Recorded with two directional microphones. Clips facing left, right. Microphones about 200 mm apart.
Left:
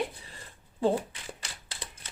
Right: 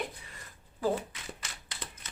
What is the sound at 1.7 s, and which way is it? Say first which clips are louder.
Typewriter: right 1 dB; 30° left (ahead or behind).